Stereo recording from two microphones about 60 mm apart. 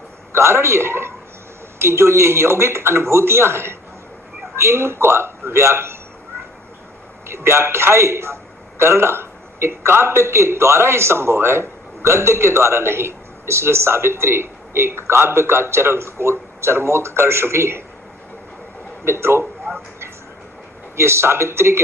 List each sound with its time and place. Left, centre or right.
0.3 s a man's voice: right
7.3 s a man's voice: right
19.0 s a man's voice: right
20.9 s a man's voice: right